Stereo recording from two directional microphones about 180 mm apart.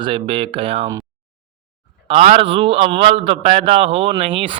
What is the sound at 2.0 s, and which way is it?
A man's voice, 35° right (ahead or behind).